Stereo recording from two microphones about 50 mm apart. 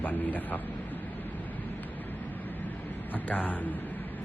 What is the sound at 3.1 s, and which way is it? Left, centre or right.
Speech, left.